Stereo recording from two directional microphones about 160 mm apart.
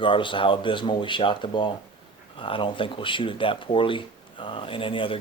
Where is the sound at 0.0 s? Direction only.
30° left (ahead or behind).